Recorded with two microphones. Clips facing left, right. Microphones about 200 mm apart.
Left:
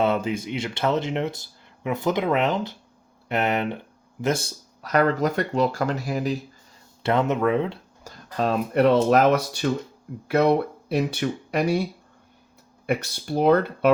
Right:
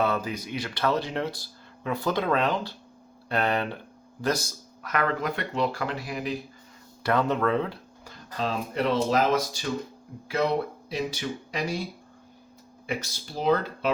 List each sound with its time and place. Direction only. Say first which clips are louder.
0.0 s speech: left 4 dB; 25° left (ahead or behind); by 6.3 s 40° left (ahead or behind)
7.0 s speech: left 3 dB; 25° left (ahead or behind)
8.0 s speech: left 6 dB; 55° left (ahead or behind)
12.8 s speech: left 7 dB; 60° left (ahead or behind)